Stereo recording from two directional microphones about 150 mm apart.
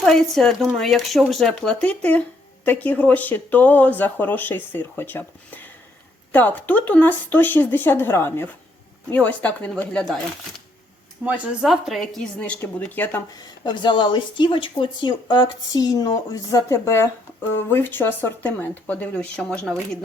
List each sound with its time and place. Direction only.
0.0 s speech: 5° left (ahead or behind)
11.3 s speech: centre (ahead or behind); by 13.2 s 15° left (ahead or behind)
13.3 s speech: 30° left (ahead or behind); by 19.7 s 5° left (ahead or behind)